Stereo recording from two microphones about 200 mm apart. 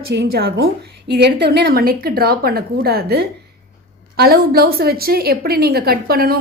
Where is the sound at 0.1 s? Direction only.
55° right (ahead or behind).